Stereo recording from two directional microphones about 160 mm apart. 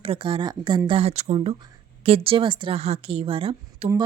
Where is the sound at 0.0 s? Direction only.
35° right (ahead or behind).